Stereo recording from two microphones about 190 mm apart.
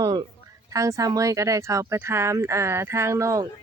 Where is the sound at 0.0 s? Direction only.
25° right (ahead or behind).